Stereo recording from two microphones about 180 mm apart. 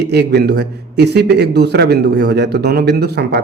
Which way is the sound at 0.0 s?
65° right (ahead or behind).